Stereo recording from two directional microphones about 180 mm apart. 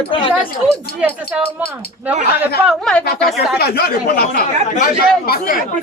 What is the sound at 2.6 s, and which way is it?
Speech, 5° left (ahead or behind).